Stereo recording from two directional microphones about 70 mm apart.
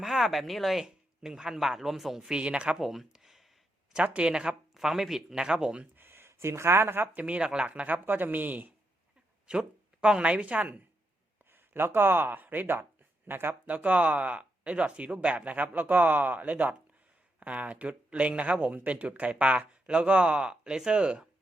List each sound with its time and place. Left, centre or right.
0.0 s a man's voice: centre
3.9 s speech: centre
6.0 s speech: right
9.5 s a woman's voice: centre
11.9 s speech: right; by 21.2 s centre